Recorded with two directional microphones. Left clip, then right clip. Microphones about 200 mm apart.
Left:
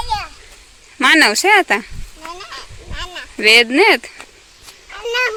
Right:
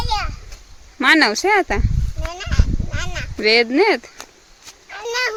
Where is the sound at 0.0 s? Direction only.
10° right (ahead or behind).